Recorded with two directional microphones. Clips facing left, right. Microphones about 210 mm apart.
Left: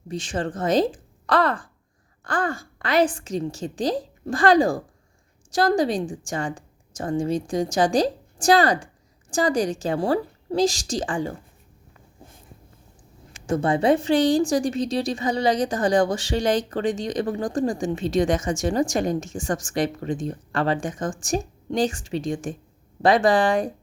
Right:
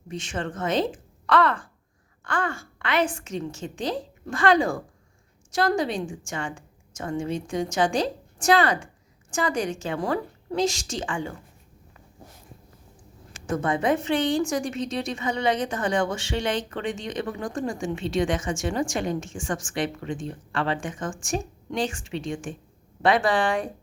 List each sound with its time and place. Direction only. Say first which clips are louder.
0.1 s a woman's voice: left 4 dB; 35° left (ahead or behind)
13.5 s a woman's voice: left 4 dB; 30° left (ahead or behind)